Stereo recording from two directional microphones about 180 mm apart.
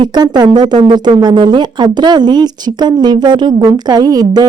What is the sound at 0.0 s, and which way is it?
Speech, 25° right (ahead or behind).